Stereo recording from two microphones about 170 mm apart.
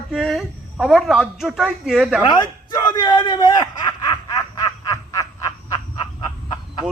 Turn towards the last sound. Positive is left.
turn(degrees=25)  # may be behind; listen again after turning